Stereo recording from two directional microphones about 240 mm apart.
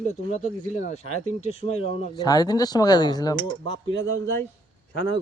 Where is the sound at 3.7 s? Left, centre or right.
Right.